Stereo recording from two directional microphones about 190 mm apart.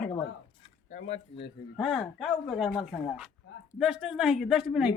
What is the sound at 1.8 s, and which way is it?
Speech, centre (ahead or behind).